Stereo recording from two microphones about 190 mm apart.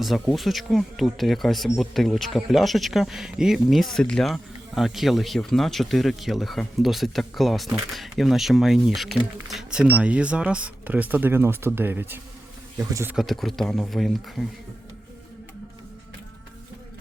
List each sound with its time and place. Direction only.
0.0 s speech: centre (ahead or behind)
13.1 s speech: centre (ahead or behind)